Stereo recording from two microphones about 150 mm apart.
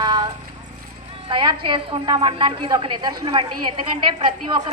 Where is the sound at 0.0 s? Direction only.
30° right (ahead or behind).